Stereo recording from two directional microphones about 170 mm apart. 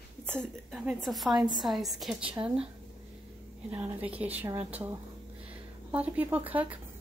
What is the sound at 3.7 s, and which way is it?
Speech, 10° right (ahead or behind).